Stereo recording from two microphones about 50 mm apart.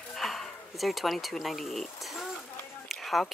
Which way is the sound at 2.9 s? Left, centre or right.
Centre.